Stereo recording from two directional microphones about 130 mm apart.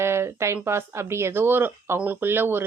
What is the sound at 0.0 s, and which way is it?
A woman's voice, 20° right (ahead or behind).